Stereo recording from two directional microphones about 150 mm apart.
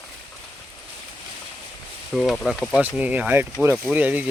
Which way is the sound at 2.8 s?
10° right (ahead or behind).